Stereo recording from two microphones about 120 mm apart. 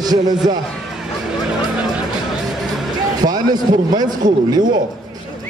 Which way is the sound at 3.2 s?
35° right (ahead or behind).